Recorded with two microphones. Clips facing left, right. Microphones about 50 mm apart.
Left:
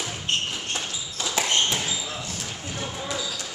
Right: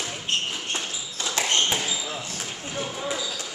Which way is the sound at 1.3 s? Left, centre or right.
Centre.